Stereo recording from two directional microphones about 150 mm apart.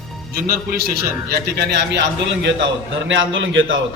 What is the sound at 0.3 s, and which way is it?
A man's voice, 80° right.